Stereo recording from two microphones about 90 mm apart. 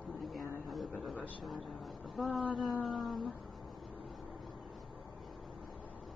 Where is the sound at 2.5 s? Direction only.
Centre (ahead or behind).